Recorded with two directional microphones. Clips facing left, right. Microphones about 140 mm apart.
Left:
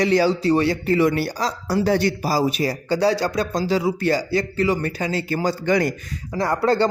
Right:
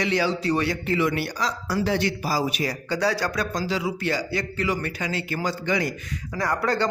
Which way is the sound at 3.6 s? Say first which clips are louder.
Left 6 dB; 40° left (ahead or behind).